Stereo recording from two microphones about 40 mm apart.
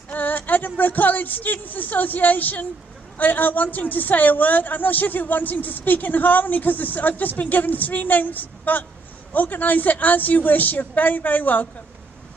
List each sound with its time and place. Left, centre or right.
0.1 s a woman's voice: left